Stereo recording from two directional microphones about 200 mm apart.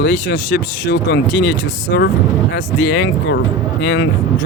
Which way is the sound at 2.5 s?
60° left (ahead or behind).